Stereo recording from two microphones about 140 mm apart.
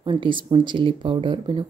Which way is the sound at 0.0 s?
35° right (ahead or behind).